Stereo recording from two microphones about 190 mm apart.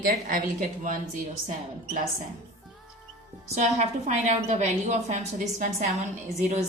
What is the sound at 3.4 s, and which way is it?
A woman's voice, 35° right (ahead or behind).